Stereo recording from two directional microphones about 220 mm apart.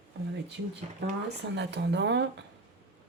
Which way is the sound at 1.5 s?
50° right (ahead or behind).